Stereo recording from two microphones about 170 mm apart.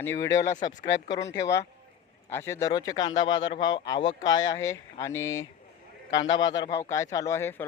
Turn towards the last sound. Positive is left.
turn(degrees=15)  # may be behind; listen again after turning